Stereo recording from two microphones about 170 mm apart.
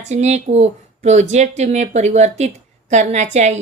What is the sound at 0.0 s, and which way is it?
Speech, 40° right (ahead or behind).